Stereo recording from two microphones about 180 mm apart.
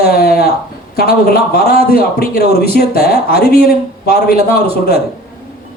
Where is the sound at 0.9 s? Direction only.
60° left (ahead or behind).